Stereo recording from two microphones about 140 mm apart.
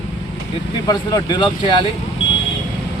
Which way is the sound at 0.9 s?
30° left (ahead or behind).